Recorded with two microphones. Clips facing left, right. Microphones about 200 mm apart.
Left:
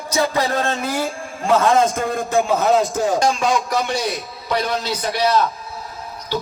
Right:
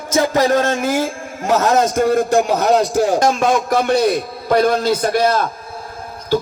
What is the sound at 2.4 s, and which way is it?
Speech, 80° right.